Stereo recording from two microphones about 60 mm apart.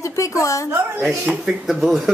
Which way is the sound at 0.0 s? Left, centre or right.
Left.